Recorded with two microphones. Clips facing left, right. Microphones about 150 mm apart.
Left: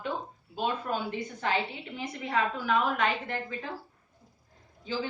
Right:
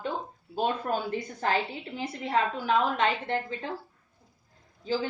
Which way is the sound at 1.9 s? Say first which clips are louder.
Right 3 dB; 30° right (ahead or behind).